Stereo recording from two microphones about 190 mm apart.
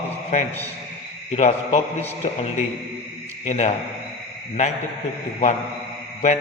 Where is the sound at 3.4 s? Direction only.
40° left (ahead or behind).